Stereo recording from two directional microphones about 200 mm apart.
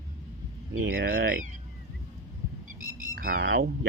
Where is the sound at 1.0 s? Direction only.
45° right (ahead or behind).